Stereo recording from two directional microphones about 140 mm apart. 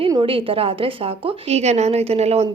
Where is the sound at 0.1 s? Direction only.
40° right (ahead or behind).